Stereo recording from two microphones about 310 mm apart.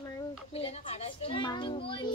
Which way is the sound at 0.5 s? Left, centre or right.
Centre.